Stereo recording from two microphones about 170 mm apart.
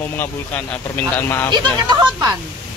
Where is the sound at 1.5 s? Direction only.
25° right (ahead or behind).